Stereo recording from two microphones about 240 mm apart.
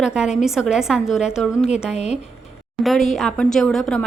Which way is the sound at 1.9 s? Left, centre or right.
Left.